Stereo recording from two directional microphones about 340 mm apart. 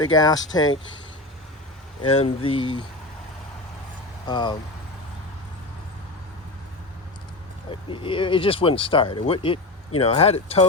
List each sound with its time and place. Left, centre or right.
0.0 s speech: centre
2.0 s speech: centre
4.3 s speech: centre
7.7 s speech: centre